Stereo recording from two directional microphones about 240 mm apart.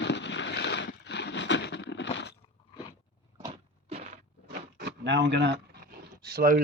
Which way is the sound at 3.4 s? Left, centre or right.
Right.